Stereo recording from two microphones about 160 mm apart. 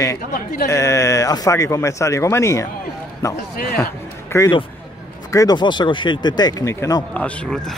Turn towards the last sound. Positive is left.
turn(degrees=5)  # may be behind; listen again after turning